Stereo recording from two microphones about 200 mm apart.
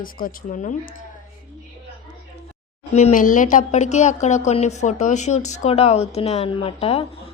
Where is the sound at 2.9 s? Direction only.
35° left (ahead or behind).